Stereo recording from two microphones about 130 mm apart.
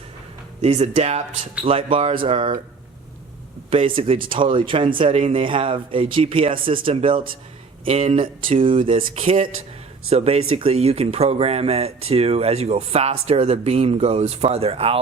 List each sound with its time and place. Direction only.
0.6 s speech: 55° right (ahead or behind)
3.7 s speech: 45° right (ahead or behind)